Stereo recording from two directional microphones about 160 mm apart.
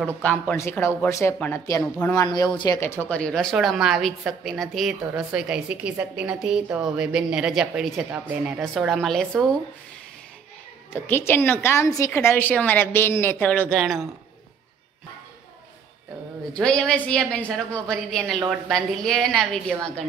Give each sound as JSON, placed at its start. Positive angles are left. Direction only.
{"t": 0.2, "sound": "a woman's voice", "side_deg": 10}
{"t": 2.2, "sound": "speech", "side_deg": 25}
{"t": 2.8, "sound": "a woman's voice", "side_deg": 15}
{"t": 10.9, "sound": "a woman's voice", "side_deg": 15}
{"t": 16.5, "sound": "a woman's voice", "side_deg": 5}